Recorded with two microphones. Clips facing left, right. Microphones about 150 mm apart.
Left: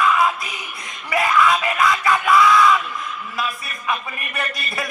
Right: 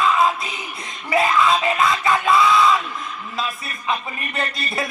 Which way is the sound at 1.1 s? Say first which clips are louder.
Even; 25° right (ahead or behind).